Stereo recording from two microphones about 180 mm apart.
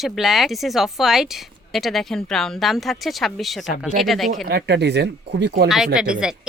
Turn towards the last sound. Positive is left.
turn(degrees=-5)  # may be behind; listen again after turning